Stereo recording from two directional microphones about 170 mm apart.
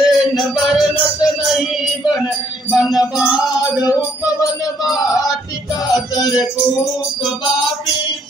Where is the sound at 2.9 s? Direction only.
Centre (ahead or behind).